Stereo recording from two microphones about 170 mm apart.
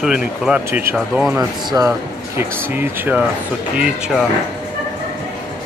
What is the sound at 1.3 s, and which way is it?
Speech, 20° right (ahead or behind).